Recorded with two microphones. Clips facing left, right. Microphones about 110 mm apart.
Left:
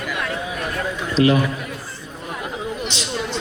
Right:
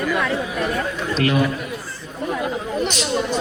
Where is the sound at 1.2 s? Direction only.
25° left (ahead or behind).